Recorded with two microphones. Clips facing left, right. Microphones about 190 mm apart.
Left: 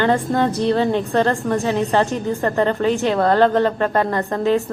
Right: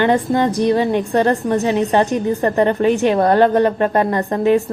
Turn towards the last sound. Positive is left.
turn(degrees=-15)  # may be behind; listen again after turning